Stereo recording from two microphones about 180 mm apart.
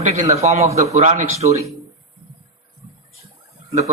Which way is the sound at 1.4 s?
25° right (ahead or behind).